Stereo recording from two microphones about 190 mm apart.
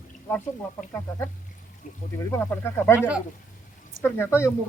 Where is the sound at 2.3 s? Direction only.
10° left (ahead or behind).